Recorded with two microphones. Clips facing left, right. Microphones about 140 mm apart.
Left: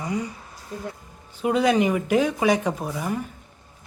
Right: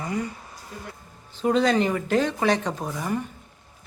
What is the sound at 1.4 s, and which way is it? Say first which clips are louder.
Speech: left 1 dB; 10° left (ahead or behind).